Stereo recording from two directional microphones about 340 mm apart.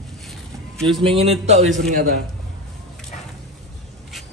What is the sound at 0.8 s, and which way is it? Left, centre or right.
Speech, centre.